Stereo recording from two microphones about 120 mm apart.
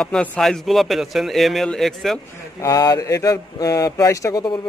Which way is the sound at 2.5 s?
30° left (ahead or behind).